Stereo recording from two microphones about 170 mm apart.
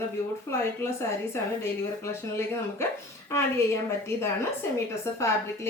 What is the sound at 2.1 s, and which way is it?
A woman's voice, 15° left (ahead or behind).